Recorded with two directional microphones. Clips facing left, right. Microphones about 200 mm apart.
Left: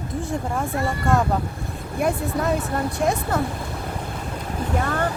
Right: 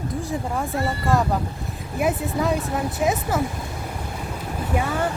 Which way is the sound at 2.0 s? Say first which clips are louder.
Even; centre (ahead or behind).